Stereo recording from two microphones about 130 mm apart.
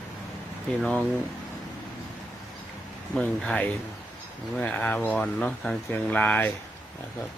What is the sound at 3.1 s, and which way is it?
Speech, 5° left (ahead or behind).